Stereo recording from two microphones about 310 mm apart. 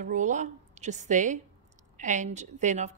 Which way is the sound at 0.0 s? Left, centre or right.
Right.